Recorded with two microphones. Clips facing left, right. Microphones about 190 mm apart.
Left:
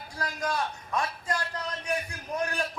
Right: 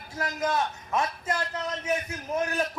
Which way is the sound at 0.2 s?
20° right (ahead or behind).